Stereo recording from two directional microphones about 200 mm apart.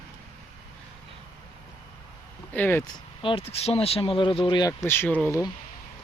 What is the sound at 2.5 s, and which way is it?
Speech, 10° left (ahead or behind).